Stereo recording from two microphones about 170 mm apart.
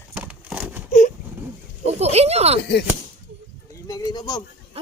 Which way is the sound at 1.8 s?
40° right (ahead or behind).